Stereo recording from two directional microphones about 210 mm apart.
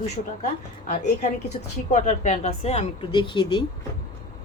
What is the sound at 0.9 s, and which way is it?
A woman's voice, 35° left (ahead or behind).